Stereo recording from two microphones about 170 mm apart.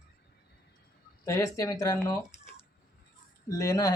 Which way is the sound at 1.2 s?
20° left (ahead or behind).